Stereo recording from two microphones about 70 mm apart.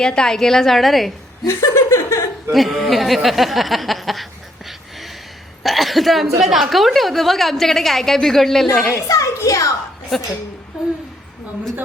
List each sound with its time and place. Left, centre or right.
0.0 s a woman's voice: centre
1.5 s speech: left
2.5 s a woman's voice: centre
8.9 s a child's voice: left
10.1 s a woman's voice: centre